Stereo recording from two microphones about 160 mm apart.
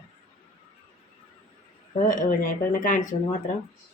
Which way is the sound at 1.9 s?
55° left (ahead or behind).